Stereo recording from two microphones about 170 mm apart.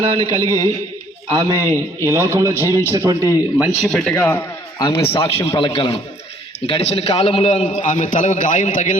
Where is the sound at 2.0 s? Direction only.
15° right (ahead or behind).